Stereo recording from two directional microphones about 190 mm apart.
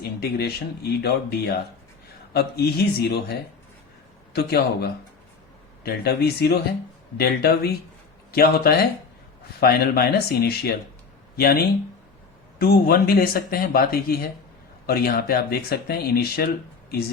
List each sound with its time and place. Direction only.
0.0 s speech: 55° left (ahead or behind)
4.4 s speech: 55° left (ahead or behind)